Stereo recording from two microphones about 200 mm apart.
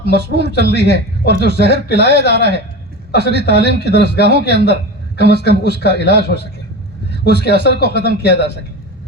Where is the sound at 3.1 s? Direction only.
55° left (ahead or behind).